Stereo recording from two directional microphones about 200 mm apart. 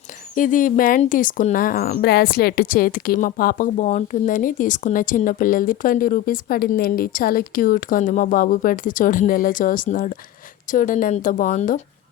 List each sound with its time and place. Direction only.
0.3 s a woman's voice: 40° left (ahead or behind)